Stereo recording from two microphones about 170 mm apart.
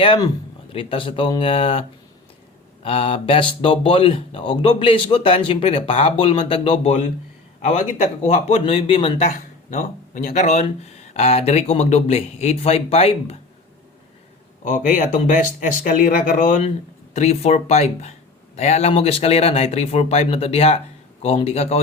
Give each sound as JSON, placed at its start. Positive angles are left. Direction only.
{"t": 0.0, "sound": "speech", "side_deg": 30}
{"t": 2.8, "sound": "speech", "side_deg": 35}
{"t": 14.6, "sound": "speech", "side_deg": 50}
{"t": 17.2, "sound": "speech", "side_deg": 40}